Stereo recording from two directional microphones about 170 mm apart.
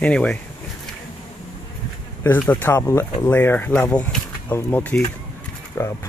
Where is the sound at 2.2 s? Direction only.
10° left (ahead or behind).